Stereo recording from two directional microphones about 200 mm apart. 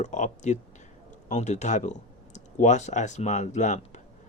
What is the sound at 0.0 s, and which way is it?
Speech, 35° left (ahead or behind).